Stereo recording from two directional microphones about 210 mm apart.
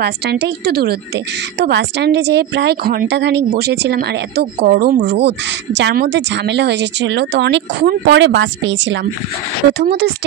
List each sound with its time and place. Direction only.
0.0 s a woman's voice: 50° right (ahead or behind)